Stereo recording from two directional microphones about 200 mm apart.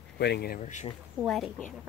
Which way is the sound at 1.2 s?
Centre (ahead or behind).